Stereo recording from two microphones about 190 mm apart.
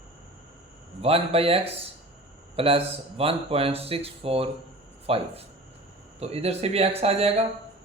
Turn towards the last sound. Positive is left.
turn(degrees=-30)  # may be behind; listen again after turning